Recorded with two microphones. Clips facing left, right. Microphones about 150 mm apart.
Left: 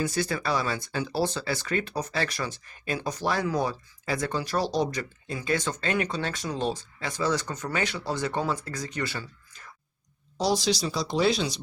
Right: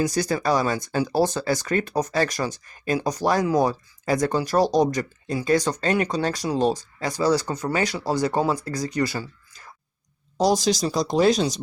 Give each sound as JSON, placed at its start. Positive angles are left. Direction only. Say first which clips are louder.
{"t": 0.0, "sound": "speech", "louder": "right 5 dB", "side_deg": -40}